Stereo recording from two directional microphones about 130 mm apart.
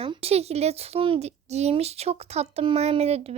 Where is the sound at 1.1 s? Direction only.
60° right (ahead or behind).